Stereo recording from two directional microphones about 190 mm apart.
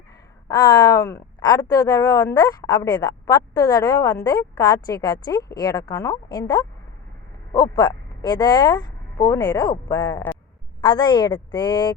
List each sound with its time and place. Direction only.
0.4 s speech: 20° left (ahead or behind)